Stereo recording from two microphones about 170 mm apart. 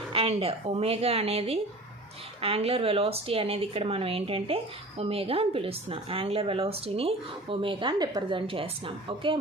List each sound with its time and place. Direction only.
0.1 s speech: 35° right (ahead or behind)